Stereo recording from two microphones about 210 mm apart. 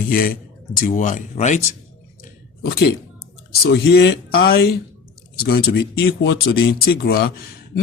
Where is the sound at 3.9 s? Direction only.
50° left (ahead or behind).